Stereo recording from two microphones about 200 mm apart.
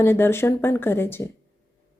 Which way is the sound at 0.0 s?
10° left (ahead or behind).